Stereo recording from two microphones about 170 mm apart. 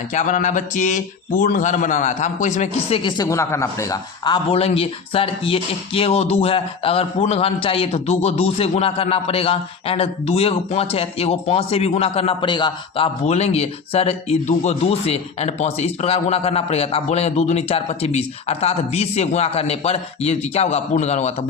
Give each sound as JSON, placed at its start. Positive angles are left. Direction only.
{"t": 0.1, "sound": "speech", "side_deg": 45}
{"t": 3.0, "sound": "a man's voice", "side_deg": 25}
{"t": 13.2, "sound": "a man's voice", "side_deg": 40}